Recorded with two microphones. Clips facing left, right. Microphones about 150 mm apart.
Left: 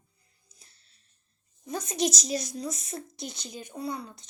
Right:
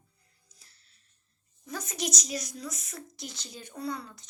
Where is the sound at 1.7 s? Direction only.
25° left (ahead or behind).